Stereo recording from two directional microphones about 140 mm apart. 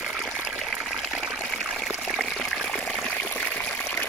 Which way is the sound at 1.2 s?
Centre (ahead or behind).